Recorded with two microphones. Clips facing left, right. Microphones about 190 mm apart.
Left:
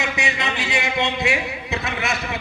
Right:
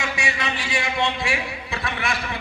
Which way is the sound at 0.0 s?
20° left (ahead or behind).